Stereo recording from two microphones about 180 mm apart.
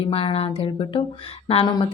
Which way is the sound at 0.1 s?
30° left (ahead or behind).